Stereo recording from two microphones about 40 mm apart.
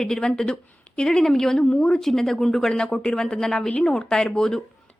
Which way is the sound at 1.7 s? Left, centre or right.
Left.